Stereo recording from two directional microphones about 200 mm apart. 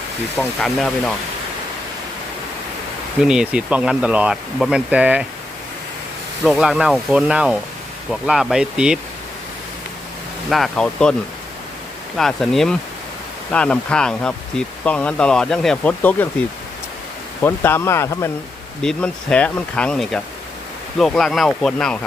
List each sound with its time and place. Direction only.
0.3 s speech: 5° left (ahead or behind)
3.2 s speech: 5° right (ahead or behind)
6.4 s speech: centre (ahead or behind)
10.5 s speech: centre (ahead or behind)
12.1 s speech: centre (ahead or behind)
17.4 s speech: 10° left (ahead or behind)